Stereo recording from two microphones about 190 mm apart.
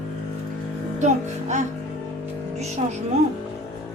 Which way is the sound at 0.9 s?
40° right (ahead or behind).